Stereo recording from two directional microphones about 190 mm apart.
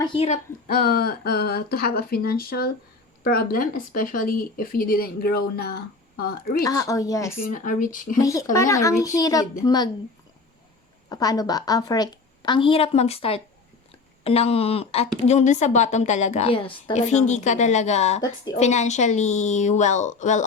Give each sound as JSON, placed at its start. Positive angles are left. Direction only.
{"t": 0.0, "sound": "a woman's voice", "side_deg": 30}
{"t": 0.7, "sound": "speech", "side_deg": 55}
{"t": 6.7, "sound": "speech", "side_deg": 15}
{"t": 7.5, "sound": "speech", "side_deg": 45}
{"t": 8.2, "sound": "a woman's voice", "side_deg": 15}
{"t": 11.1, "sound": "a woman's voice", "side_deg": 20}